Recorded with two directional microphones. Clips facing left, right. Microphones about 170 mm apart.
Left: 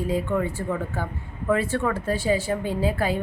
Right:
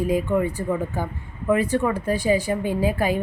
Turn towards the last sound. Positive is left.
turn(degrees=-15)  # may be behind; listen again after turning